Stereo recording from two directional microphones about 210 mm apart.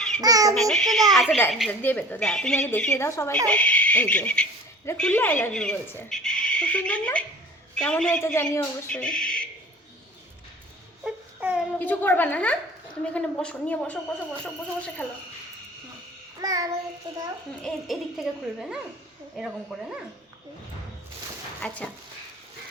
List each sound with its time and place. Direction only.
0.2 s baby laughter: 15° right (ahead or behind)
0.5 s speech: centre (ahead or behind)
11.0 s a sound: 5° right (ahead or behind)
11.8 s speech: 10° left (ahead or behind)
16.4 s child singing: 15° right (ahead or behind)
17.6 s speech: centre (ahead or behind)
21.6 s speech: 5° left (ahead or behind)